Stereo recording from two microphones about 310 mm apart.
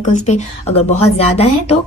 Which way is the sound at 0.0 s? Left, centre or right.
Left.